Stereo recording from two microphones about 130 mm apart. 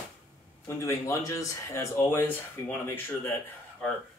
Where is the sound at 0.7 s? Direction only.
20° left (ahead or behind).